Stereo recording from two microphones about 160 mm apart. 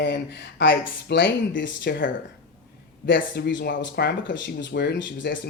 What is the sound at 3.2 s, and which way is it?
Speech, 90° left.